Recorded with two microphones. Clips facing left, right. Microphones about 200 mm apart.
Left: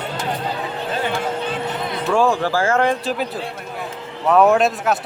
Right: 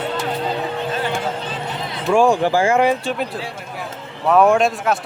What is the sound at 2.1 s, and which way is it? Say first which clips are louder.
Speech: right 3 dB; 15° right (ahead or behind).